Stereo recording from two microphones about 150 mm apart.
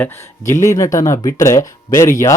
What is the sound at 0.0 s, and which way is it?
Speech, 20° left (ahead or behind).